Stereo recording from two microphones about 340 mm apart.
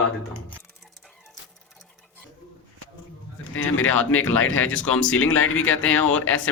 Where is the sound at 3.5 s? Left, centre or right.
Left.